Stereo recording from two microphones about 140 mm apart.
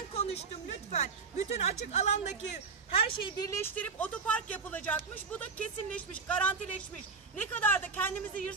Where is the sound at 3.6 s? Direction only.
10° left (ahead or behind).